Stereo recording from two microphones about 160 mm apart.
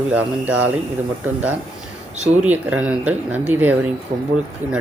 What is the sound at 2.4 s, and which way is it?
Speech, 10° right (ahead or behind).